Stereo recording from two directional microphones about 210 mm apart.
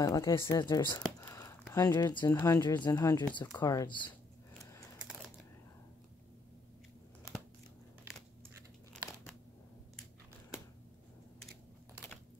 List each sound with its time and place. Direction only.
0.0 s speech: 15° left (ahead or behind)